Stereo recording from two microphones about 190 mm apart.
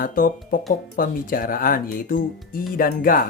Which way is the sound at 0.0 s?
45° left (ahead or behind).